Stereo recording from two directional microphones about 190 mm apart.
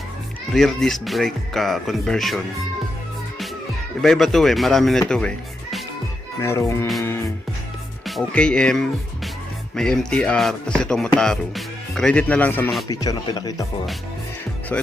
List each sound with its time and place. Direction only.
0.5 s speech: centre (ahead or behind)
4.0 s speech: centre (ahead or behind)
6.4 s speech: 15° left (ahead or behind)
8.0 s speech: centre (ahead or behind); by 13.7 s 20° left (ahead or behind)